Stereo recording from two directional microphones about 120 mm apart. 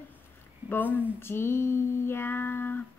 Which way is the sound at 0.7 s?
15° left (ahead or behind).